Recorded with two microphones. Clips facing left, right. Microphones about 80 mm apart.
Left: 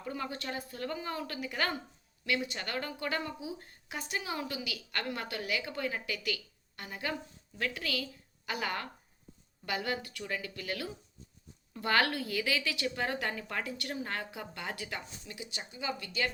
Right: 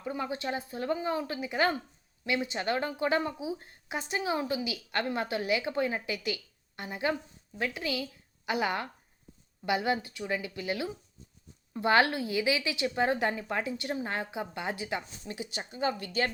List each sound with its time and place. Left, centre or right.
0.0 s a woman's voice: centre
15.2 s speech: right